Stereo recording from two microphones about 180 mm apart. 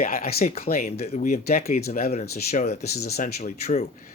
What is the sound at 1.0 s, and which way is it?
Speech, 40° left (ahead or behind).